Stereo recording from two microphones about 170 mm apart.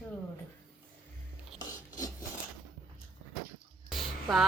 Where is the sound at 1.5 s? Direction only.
20° left (ahead or behind).